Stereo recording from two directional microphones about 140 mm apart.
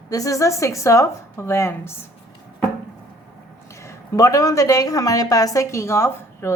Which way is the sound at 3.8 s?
25° left (ahead or behind).